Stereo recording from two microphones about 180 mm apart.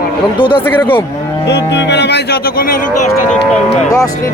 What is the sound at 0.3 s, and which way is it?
Speech, 25° left (ahead or behind).